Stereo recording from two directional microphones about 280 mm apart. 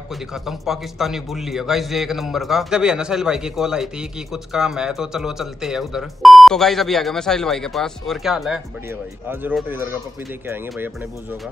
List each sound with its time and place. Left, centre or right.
0.3 s a man's voice: centre